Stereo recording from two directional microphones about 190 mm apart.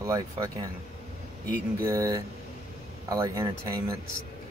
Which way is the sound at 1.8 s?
15° right (ahead or behind).